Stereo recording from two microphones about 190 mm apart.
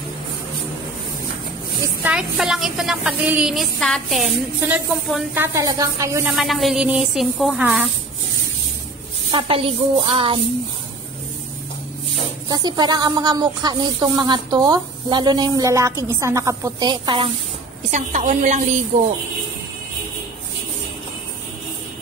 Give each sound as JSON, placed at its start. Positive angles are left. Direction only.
{"t": 2.0, "sound": "a woman's voice", "side_deg": -5}
{"t": 4.6, "sound": "speech", "side_deg": -10}
{"t": 6.3, "sound": "a woman's voice", "side_deg": 0}
{"t": 9.3, "sound": "speech", "side_deg": -30}
{"t": 12.4, "sound": "speech", "side_deg": -20}
{"t": 17.9, "sound": "a woman's voice", "side_deg": -40}